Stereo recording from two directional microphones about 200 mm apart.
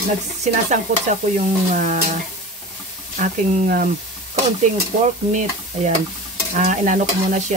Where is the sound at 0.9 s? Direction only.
40° right (ahead or behind).